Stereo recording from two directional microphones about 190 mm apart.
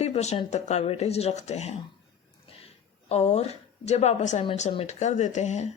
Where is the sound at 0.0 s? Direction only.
35° left (ahead or behind).